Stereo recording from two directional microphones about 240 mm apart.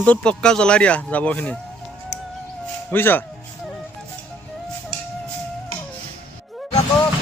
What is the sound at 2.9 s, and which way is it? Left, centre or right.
Speech, centre.